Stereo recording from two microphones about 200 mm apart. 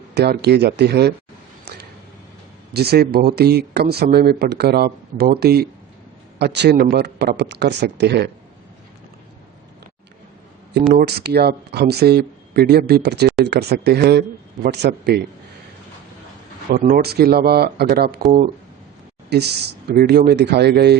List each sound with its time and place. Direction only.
0.1 s speech: 55° right (ahead or behind)
2.7 s speech: 55° right (ahead or behind)
10.9 s speech: 55° right (ahead or behind)
16.7 s speech: 50° right (ahead or behind)